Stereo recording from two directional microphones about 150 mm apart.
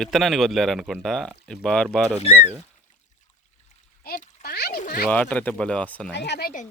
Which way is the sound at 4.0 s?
85° left.